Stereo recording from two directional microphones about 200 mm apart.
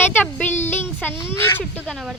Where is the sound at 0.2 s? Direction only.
10° left (ahead or behind).